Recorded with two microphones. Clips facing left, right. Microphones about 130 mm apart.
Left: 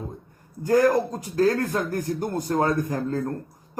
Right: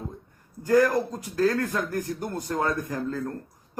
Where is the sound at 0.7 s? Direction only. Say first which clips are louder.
Left 2 dB; 40° left (ahead or behind).